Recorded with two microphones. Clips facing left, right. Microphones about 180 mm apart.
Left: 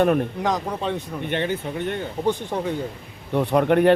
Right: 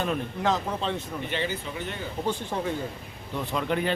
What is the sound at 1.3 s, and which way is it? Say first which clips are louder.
Speech: left 7 dB; 55° left (ahead or behind).